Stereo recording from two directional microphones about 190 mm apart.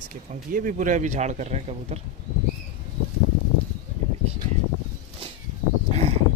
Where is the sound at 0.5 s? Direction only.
45° right (ahead or behind).